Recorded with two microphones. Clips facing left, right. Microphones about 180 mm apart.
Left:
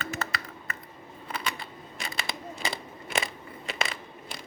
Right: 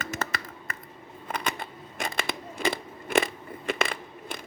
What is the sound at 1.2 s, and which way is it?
Scissors, 50° right (ahead or behind).